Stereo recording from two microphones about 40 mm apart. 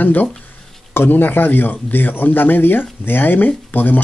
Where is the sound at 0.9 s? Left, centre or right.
Left.